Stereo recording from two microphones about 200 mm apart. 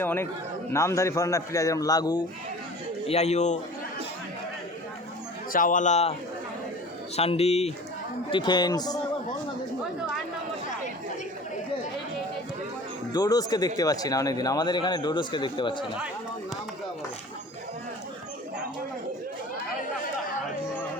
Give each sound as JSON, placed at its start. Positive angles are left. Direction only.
{"t": 0.0, "sound": "a man's voice", "side_deg": 10}
{"t": 3.1, "sound": "a man's voice", "side_deg": 35}
{"t": 5.5, "sound": "a man's voice", "side_deg": 40}
{"t": 7.2, "sound": "a man's voice", "side_deg": 30}
{"t": 13.1, "sound": "a man's voice", "side_deg": 20}